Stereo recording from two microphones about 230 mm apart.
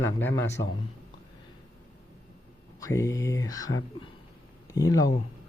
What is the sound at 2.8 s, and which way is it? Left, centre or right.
A man's voice, centre.